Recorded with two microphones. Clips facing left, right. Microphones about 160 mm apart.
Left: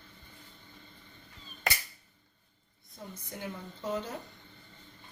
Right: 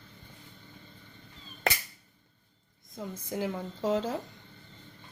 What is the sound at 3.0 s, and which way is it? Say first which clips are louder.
A woman's voice: right 8 dB; 90° right.